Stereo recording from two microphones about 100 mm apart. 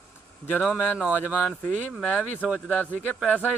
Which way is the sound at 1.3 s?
15° left (ahead or behind).